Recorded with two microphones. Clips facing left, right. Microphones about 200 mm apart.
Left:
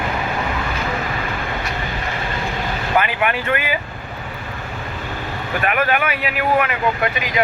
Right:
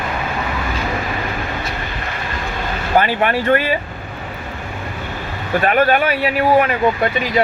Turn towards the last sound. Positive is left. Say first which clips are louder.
# right 4 dB
turn(degrees=-35)  # may be behind; listen again after turning